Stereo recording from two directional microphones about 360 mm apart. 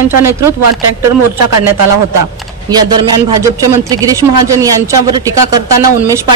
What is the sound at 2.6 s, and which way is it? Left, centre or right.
Speech, centre.